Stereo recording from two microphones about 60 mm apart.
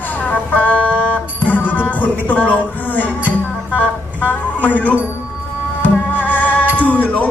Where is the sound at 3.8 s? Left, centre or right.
Left.